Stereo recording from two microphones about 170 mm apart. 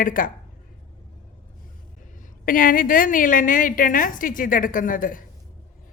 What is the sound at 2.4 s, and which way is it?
A woman's voice, 55° left (ahead or behind).